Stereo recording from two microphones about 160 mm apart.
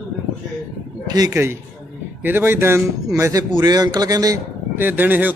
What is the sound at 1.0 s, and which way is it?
A man's voice, 25° right (ahead or behind).